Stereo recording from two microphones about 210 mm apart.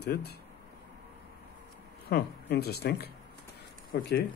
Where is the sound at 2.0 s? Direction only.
50° left (ahead or behind).